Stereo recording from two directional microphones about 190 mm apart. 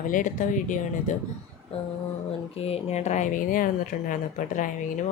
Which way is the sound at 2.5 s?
30° left (ahead or behind).